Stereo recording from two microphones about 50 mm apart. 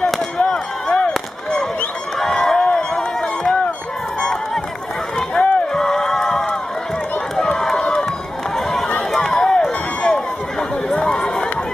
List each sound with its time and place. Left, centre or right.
0.5 s chop: centre
2.1 s run: centre
5.4 s rowboat: centre
5.7 s a sound: centre
7.3 s run: centre
8.5 s a sound: centre
9.1 s run: centre